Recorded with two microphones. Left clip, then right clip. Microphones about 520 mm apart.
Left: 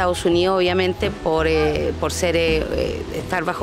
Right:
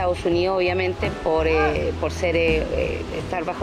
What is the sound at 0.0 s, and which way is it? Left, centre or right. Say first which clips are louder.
Speech: left 3 dB; left.